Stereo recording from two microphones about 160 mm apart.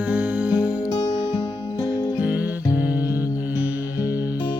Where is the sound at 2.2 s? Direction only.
10° right (ahead or behind).